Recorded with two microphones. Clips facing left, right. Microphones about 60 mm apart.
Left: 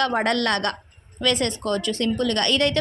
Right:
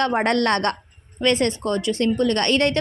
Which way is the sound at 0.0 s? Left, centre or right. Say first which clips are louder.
Right 2 dB; right.